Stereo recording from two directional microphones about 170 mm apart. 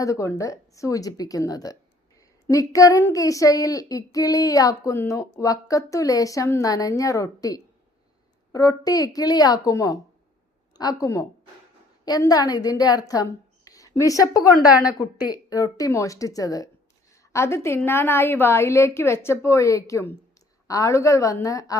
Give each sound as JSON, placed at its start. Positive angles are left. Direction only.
{"t": 0.0, "sound": "child singing", "side_deg": 20}
{"t": 13.7, "sound": "a woman's voice", "side_deg": 20}
{"t": 14.7, "sound": "a woman's voice", "side_deg": -5}
{"t": 14.9, "sound": "child singing", "side_deg": 20}
{"t": 17.3, "sound": "a woman's voice", "side_deg": 15}
{"t": 20.7, "sound": "child singing", "side_deg": 20}